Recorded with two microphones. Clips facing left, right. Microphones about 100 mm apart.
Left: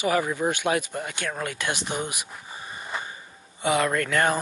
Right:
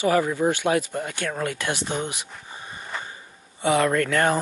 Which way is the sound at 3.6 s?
15° left (ahead or behind).